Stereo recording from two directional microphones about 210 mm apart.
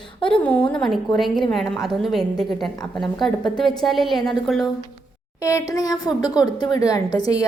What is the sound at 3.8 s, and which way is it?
Speech, centre (ahead or behind).